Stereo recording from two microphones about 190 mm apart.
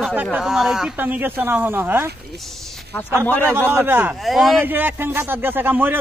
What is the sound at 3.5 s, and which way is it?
Speech, 10° right (ahead or behind).